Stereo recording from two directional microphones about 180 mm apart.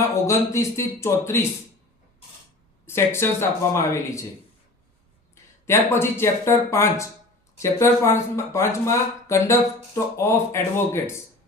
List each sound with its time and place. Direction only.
0.1 s speech: 15° left (ahead or behind)
2.8 s speech: 15° left (ahead or behind)
5.3 s speech: 15° left (ahead or behind)